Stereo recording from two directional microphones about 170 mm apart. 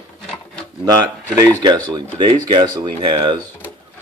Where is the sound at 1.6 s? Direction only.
25° right (ahead or behind).